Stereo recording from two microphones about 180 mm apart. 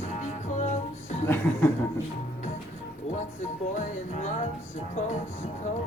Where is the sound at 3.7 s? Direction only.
40° left (ahead or behind).